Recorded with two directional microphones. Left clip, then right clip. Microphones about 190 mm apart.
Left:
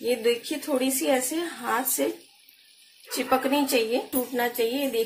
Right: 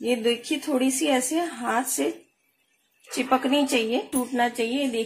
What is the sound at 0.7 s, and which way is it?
Speech, 40° right (ahead or behind).